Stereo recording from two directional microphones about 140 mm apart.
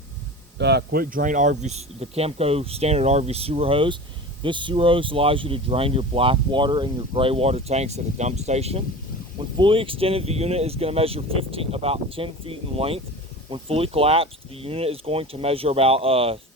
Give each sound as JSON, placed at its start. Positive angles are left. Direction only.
{"t": 0.9, "sound": "speech", "side_deg": -75}
{"t": 9.6, "sound": "speech", "side_deg": -40}